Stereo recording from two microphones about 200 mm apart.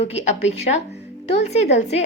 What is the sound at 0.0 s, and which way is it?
A woman's voice, 30° left (ahead or behind).